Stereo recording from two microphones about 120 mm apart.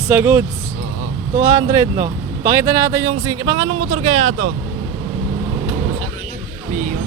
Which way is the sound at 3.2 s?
35° right (ahead or behind).